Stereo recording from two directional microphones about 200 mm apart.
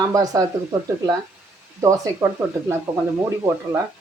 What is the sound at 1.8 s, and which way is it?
Speech, 15° right (ahead or behind).